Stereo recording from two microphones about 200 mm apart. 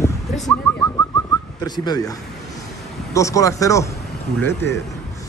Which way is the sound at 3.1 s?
15° left (ahead or behind).